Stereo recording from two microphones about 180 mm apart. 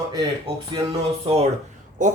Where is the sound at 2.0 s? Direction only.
45° right (ahead or behind).